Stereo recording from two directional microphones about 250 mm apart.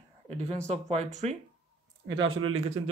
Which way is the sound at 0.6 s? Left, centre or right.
Right.